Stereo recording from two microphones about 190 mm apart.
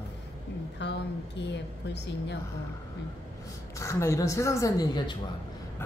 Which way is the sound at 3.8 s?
15° left (ahead or behind).